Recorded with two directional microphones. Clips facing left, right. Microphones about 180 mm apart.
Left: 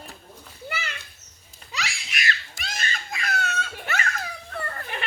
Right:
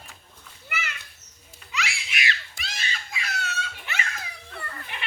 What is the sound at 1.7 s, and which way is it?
Baby cry, 35° left (ahead or behind).